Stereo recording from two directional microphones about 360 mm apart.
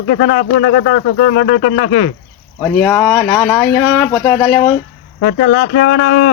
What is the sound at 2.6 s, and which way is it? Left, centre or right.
Speech, centre.